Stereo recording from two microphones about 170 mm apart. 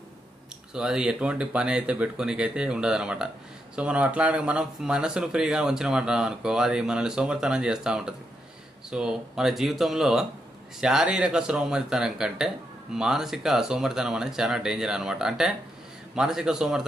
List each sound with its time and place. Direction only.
0.7 s speech: 5° right (ahead or behind)